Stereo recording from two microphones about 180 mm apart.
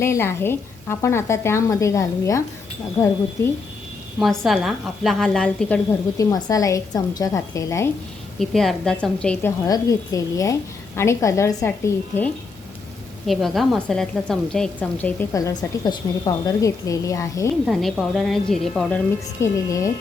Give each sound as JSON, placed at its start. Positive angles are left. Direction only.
{"t": 0.0, "sound": "a woman's voice", "side_deg": 15}
{"t": 4.2, "sound": "a woman's voice", "side_deg": 0}
{"t": 6.1, "sound": "a woman's voice", "side_deg": 20}
{"t": 8.4, "sound": "a woman's voice", "side_deg": 0}
{"t": 9.6, "sound": "a woman's voice", "side_deg": 20}
{"t": 13.2, "sound": "a woman's voice", "side_deg": 0}
{"t": 17.7, "sound": "a woman's voice", "side_deg": 0}
{"t": 19.4, "sound": "a woman's voice", "side_deg": 15}